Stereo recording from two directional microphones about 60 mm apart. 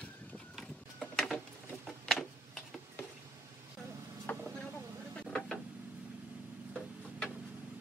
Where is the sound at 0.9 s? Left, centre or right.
Centre.